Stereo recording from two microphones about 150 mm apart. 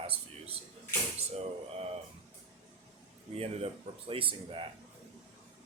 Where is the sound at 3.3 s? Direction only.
40° right (ahead or behind).